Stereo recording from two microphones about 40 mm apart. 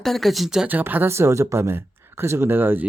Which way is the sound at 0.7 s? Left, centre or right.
Right.